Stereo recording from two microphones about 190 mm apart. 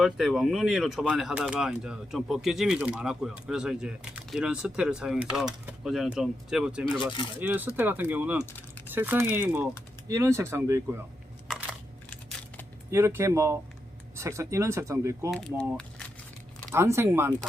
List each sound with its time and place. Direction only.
0.0 s speech: centre (ahead or behind)
7.0 s speech: 25° left (ahead or behind)
7.3 s speech: 10° right (ahead or behind)
12.9 s speech: 15° right (ahead or behind)
15.3 s speech: 5° left (ahead or behind)
16.7 s speech: 15° right (ahead or behind)